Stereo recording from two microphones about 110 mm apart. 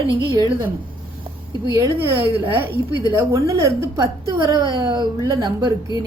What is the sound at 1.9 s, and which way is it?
Speech, 20° right (ahead or behind).